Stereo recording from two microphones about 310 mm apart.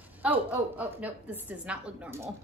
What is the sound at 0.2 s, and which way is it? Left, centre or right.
Speech, centre.